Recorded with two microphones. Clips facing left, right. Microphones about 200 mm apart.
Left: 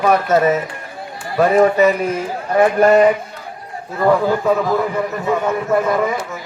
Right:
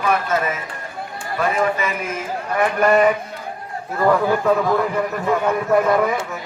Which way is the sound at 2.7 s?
25° left (ahead or behind).